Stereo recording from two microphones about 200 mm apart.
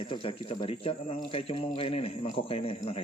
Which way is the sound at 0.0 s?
25° left (ahead or behind).